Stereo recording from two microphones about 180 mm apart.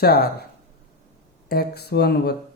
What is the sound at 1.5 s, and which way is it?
Speech, 65° left (ahead or behind).